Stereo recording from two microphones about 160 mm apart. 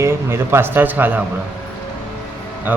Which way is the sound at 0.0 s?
15° right (ahead or behind).